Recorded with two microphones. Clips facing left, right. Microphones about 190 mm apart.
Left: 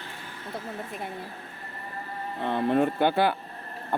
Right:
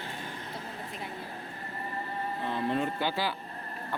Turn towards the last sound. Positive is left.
turn(degrees=55)  # may be behind; listen again after turning